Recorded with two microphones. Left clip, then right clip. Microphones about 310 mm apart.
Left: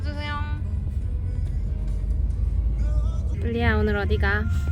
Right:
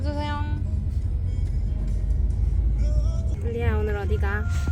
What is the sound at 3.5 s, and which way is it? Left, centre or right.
Speech, centre.